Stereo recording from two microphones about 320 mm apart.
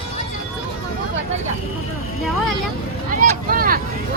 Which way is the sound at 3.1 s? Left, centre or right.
Right.